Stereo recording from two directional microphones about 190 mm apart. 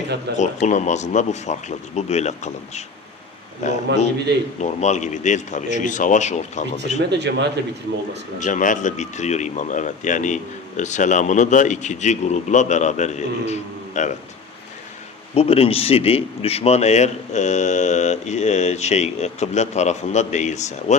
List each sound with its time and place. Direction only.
0.3 s speech: 40° left (ahead or behind)
7.1 s speech: 65° right (ahead or behind)
8.4 s speech: 40° left (ahead or behind)
15.4 s speech: 30° left (ahead or behind)